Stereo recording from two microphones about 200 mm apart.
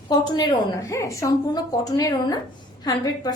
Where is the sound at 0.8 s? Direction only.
15° left (ahead or behind).